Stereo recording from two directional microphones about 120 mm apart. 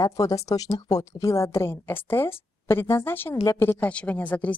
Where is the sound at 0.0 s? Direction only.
25° left (ahead or behind).